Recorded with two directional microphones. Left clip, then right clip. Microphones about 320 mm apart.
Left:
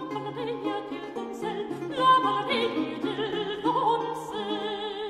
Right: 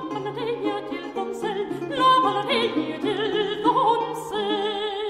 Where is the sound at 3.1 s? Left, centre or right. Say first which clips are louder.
Right 6 dB; right.